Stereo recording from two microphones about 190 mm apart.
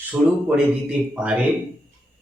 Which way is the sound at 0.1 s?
5° right (ahead or behind).